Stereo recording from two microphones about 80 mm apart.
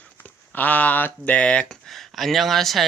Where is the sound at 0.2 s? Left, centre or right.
Left.